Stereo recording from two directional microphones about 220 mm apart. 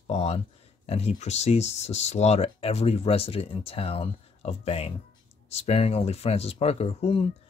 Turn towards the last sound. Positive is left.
turn(degrees=25)  # may be behind; listen again after turning